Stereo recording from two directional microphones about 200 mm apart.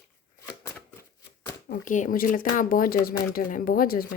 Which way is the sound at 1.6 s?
40° left (ahead or behind).